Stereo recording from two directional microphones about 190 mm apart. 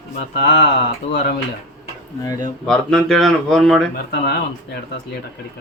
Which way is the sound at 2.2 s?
20° left (ahead or behind).